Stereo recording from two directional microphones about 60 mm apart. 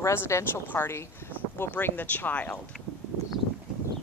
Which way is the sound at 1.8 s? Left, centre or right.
Left.